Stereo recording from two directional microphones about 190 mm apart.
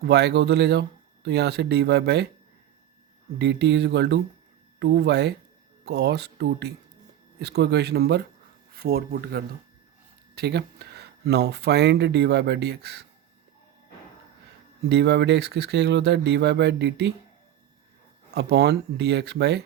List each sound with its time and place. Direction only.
0.0 s speech: 60° right (ahead or behind)
3.3 s speech: 65° right (ahead or behind)
14.8 s speech: 60° right (ahead or behind)
18.3 s speech: 60° right (ahead or behind)